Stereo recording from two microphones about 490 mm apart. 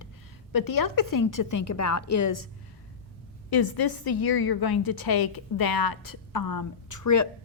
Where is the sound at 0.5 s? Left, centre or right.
Left.